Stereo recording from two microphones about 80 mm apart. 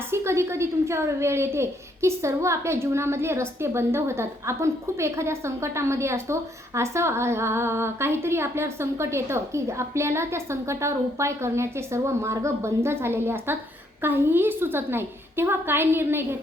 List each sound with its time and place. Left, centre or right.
0.1 s a woman's voice: right